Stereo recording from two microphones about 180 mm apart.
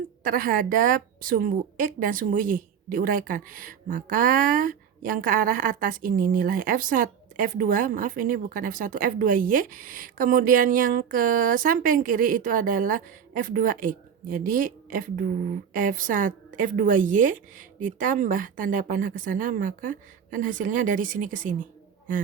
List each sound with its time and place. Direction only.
0.2 s a woman's voice: 50° right (ahead or behind)